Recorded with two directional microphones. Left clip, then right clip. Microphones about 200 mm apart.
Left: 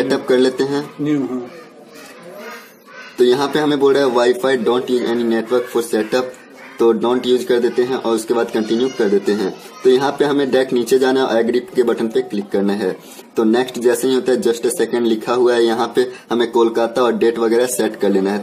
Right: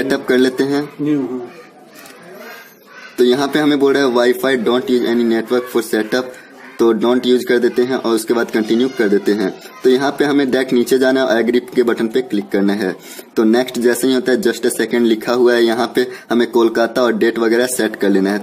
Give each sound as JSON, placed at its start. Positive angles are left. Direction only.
{"t": 0.1, "sound": "speech", "side_deg": -40}
{"t": 3.2, "sound": "speech", "side_deg": -40}